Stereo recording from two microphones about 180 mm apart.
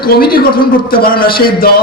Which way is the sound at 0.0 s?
60° left (ahead or behind).